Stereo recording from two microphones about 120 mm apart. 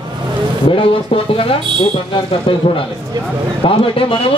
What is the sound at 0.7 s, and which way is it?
A man's voice, 50° left (ahead or behind).